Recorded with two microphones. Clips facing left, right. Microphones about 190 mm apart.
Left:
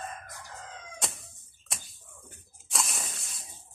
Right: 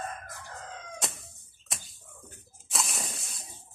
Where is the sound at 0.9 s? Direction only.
Centre (ahead or behind).